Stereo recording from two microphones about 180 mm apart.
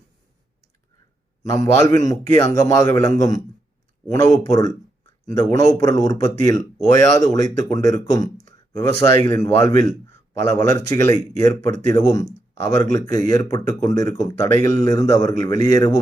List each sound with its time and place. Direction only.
1.4 s speech: 20° left (ahead or behind)